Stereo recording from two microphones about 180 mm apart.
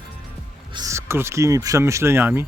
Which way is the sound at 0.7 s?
20° right (ahead or behind).